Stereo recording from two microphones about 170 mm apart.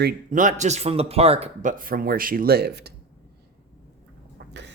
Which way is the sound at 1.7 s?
55° right (ahead or behind).